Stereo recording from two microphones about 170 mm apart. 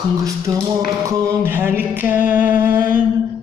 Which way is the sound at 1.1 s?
20° right (ahead or behind).